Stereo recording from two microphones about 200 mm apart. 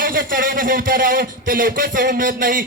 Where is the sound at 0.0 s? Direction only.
45° right (ahead or behind).